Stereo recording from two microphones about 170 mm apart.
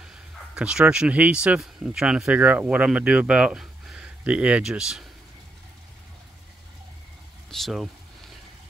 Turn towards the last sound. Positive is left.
turn(degrees=0)  # may be behind; listen again after turning